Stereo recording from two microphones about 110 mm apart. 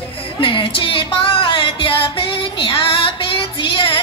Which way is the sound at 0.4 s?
50° left (ahead or behind).